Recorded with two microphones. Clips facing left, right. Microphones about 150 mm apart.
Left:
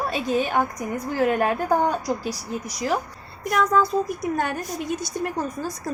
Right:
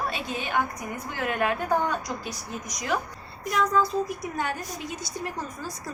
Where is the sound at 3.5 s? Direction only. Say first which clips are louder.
Left 4 dB; 60° left (ahead or behind).